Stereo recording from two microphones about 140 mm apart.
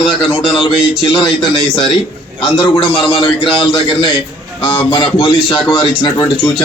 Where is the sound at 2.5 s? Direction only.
35° left (ahead or behind).